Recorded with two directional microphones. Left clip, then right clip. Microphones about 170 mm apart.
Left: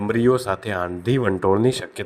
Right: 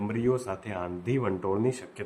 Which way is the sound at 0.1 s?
35° left (ahead or behind).